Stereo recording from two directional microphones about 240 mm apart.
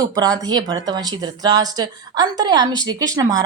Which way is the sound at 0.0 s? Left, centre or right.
Centre.